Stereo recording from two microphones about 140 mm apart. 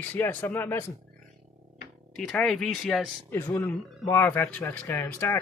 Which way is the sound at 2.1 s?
Centre (ahead or behind).